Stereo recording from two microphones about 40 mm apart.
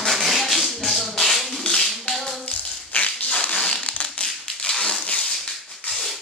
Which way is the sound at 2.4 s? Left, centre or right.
Left.